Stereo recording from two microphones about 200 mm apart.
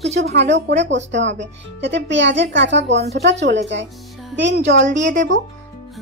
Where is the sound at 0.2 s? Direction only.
60° right (ahead or behind).